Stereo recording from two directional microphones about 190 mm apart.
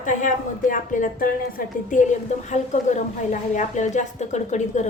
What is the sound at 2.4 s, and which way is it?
Speech, 40° left (ahead or behind).